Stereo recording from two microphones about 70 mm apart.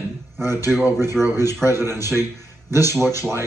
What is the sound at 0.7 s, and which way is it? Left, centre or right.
A man's voice, right.